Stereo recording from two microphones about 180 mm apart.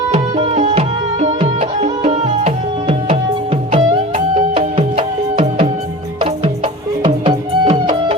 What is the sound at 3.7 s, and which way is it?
Music, 45° right (ahead or behind).